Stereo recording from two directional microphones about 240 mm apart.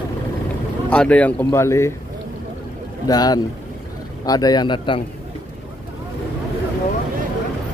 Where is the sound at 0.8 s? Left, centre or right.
Centre.